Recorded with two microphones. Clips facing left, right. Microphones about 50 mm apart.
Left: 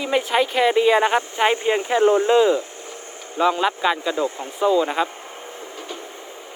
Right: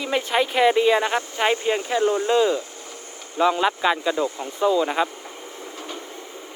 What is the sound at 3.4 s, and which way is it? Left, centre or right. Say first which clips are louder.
Speech: even; centre.